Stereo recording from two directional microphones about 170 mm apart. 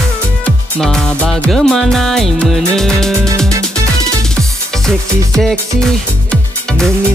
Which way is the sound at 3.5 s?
20° right (ahead or behind).